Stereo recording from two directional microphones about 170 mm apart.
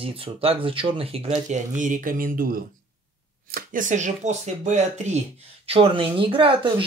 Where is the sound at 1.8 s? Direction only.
50° right (ahead or behind).